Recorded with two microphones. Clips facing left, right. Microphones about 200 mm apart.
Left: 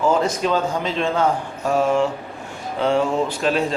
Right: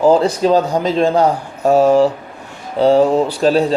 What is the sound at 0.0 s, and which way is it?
Mantra, 35° right (ahead or behind).